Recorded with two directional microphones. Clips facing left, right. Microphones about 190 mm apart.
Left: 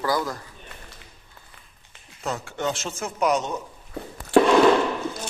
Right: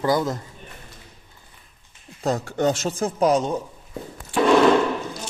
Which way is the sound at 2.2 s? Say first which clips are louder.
Right 6 dB; 40° right (ahead or behind).